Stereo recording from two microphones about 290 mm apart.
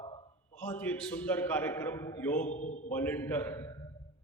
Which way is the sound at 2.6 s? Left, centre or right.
Left.